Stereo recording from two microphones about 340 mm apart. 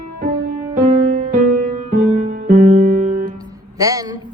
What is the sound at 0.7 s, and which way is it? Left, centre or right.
Music, centre.